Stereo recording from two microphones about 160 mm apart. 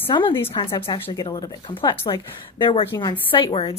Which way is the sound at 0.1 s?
30° left (ahead or behind).